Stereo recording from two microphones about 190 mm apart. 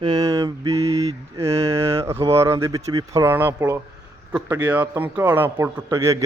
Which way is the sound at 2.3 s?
15° right (ahead or behind).